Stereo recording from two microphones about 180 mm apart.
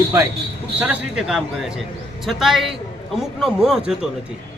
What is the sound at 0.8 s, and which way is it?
Speech, 5° right (ahead or behind).